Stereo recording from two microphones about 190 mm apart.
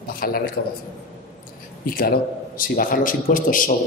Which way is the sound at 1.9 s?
50° left (ahead or behind).